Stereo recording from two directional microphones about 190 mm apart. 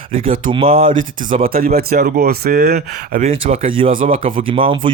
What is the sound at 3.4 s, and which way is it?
Speech, 30° right (ahead or behind).